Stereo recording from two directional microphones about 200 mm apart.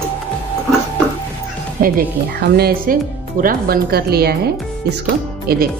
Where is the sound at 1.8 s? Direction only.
45° right (ahead or behind).